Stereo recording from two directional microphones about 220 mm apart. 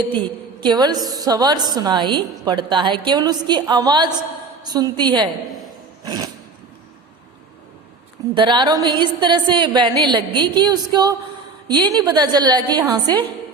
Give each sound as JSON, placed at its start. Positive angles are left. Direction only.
{"t": 0.2, "sound": "a woman's voice", "side_deg": -20}
{"t": 8.4, "sound": "a woman's voice", "side_deg": -20}